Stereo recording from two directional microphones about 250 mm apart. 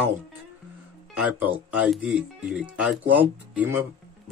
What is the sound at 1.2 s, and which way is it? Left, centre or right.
Speech, centre.